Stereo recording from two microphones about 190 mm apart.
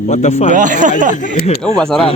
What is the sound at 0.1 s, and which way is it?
Speech, 35° left (ahead or behind).